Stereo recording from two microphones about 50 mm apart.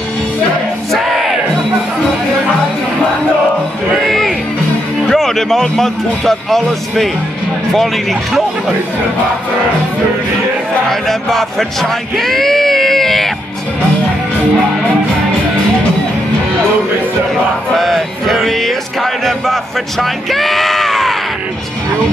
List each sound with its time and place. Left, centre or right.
0.9 s music: centre
4.0 s music: centre
5.1 s speech: centre
10.9 s music: centre
17.7 s music: centre